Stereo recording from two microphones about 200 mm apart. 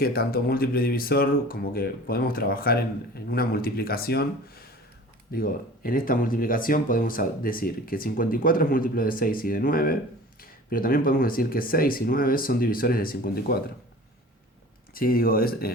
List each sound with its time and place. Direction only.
0.0 s speech: 50° left (ahead or behind)
14.9 s speech: 45° left (ahead or behind)